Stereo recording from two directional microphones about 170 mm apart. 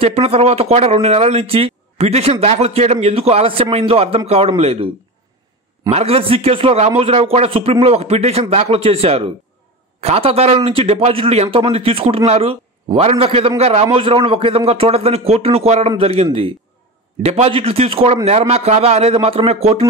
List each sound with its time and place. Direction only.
0.0 s a man's voice: 35° right (ahead or behind)
5.9 s a man's voice: 35° right (ahead or behind)